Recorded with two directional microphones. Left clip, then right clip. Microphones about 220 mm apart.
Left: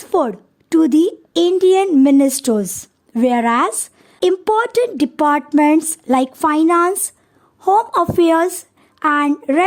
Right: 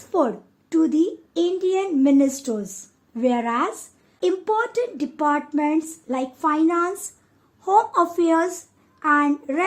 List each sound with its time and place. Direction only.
0.1 s a woman's voice: 50° left (ahead or behind)